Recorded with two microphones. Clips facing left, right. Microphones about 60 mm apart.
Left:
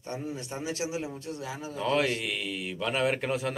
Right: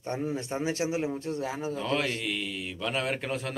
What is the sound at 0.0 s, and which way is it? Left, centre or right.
Speech, right.